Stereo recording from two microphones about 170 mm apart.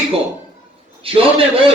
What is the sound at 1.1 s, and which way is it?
Speech, 30° right (ahead or behind).